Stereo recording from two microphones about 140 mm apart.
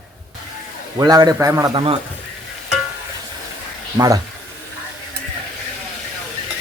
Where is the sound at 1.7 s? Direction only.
40° right (ahead or behind).